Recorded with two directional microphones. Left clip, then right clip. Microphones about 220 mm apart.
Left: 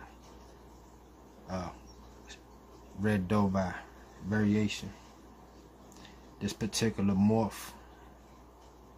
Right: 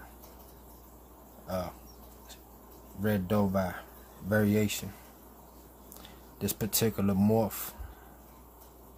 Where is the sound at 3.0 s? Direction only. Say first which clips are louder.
Right 1 dB; 5° right (ahead or behind).